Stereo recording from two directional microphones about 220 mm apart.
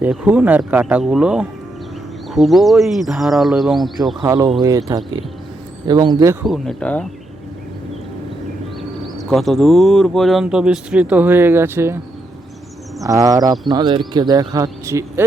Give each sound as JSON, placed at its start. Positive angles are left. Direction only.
{"t": 0.0, "sound": "speech", "side_deg": -5}
{"t": 4.2, "sound": "speech", "side_deg": -15}
{"t": 6.4, "sound": "speech", "side_deg": 0}
{"t": 9.1, "sound": "speech", "side_deg": 0}
{"t": 13.1, "sound": "speech", "side_deg": -15}